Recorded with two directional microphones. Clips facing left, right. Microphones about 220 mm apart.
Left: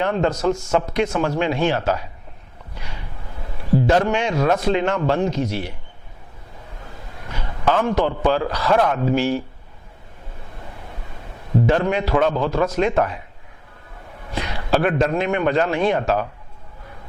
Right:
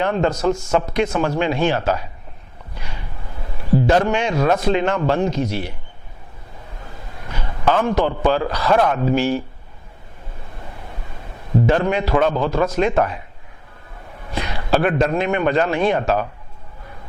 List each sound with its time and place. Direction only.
0.0 s a man's voice: 15° right (ahead or behind)
0.8 s speech: 20° right (ahead or behind)
1.0 s a man's voice: 10° right (ahead or behind)
2.7 s a sound: 15° right (ahead or behind)
3.8 s a man's voice: 15° right (ahead or behind)
7.3 s a man's voice: 20° right (ahead or behind)
11.6 s a man's voice: 15° right (ahead or behind)
14.3 s a man's voice: 15° right (ahead or behind)